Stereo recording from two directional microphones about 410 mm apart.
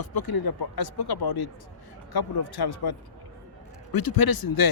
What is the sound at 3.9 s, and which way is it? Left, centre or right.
Speech, left.